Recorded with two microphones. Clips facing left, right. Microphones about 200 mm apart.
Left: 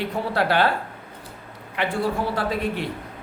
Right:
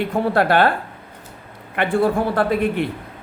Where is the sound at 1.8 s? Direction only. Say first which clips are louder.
Right 6 dB; 55° right (ahead or behind).